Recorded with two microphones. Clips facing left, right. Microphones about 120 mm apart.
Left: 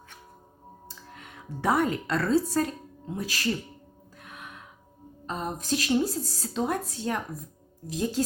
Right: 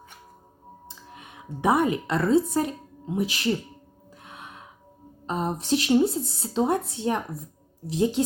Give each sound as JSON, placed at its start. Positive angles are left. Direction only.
{"t": 0.9, "sound": "speech", "side_deg": -20}
{"t": 4.2, "sound": "gasp", "side_deg": -25}
{"t": 5.2, "sound": "speech", "side_deg": -20}